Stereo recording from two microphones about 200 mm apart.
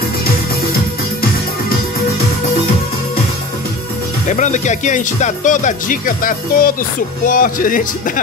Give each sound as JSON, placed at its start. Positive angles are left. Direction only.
{"t": 4.3, "sound": "music", "side_deg": 35}
{"t": 7.2, "sound": "speech", "side_deg": 40}